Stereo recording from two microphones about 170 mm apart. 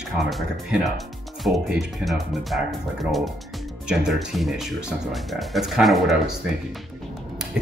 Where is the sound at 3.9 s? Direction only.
5° right (ahead or behind).